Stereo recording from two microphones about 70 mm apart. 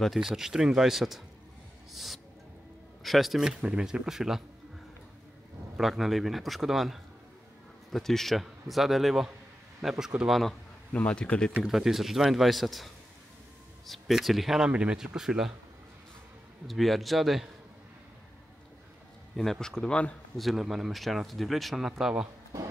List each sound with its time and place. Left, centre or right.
0.0 s a man's voice: centre
1.9 s music: centre
3.0 s a man's voice: centre
5.8 s a man's voice: centre
10.9 s a man's voice: centre
11.6 s speech: centre
14.7 s a man's voice: centre
16.6 s speech: centre
19.3 s a man's voice: centre
20.3 s speech: centre